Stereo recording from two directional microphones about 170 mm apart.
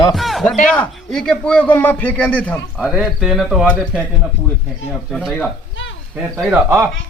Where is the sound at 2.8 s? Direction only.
Centre (ahead or behind).